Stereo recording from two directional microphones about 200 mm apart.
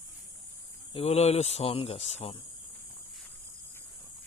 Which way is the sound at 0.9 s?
30° left (ahead or behind).